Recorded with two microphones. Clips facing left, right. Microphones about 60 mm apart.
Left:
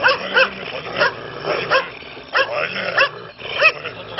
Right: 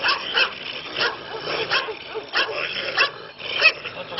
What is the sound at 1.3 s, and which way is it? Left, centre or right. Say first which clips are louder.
Bow-wow: left 6 dB; left.